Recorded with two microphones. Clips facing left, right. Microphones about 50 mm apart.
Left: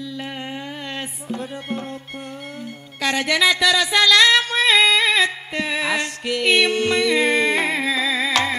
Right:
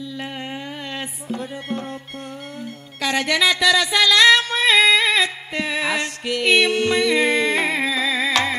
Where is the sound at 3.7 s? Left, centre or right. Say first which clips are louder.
Left 1 dB; centre.